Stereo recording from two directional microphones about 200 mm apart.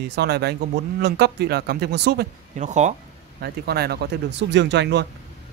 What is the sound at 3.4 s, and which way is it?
Speech, 50° right (ahead or behind).